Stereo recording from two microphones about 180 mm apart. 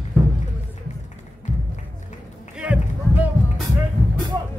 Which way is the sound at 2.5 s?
5° right (ahead or behind).